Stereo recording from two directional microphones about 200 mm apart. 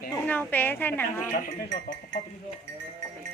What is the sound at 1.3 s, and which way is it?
Speech, 45° left (ahead or behind).